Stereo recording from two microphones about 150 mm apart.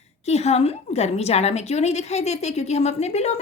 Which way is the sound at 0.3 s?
45° left (ahead or behind).